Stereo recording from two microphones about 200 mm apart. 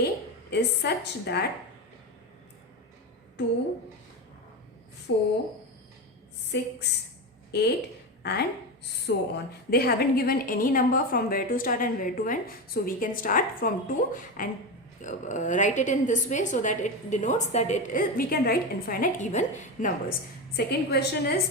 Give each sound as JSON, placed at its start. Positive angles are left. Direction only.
{"t": 0.5, "sound": "a woman's voice", "side_deg": 55}
{"t": 3.4, "sound": "a woman's voice", "side_deg": 60}
{"t": 5.1, "sound": "a woman's voice", "side_deg": 70}
{"t": 6.5, "sound": "a woman's voice", "side_deg": 60}
{"t": 20.7, "sound": "a woman's voice", "side_deg": 55}